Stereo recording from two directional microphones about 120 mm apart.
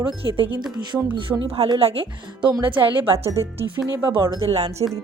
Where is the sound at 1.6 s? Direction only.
45° right (ahead or behind).